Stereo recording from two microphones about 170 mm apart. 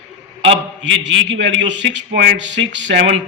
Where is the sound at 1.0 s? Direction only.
90° right.